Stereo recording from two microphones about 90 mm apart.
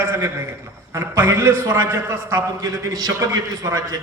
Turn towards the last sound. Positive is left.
turn(degrees=-40)  # may be behind; listen again after turning